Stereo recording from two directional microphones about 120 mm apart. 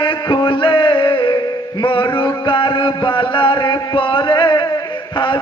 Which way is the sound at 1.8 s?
40° left (ahead or behind).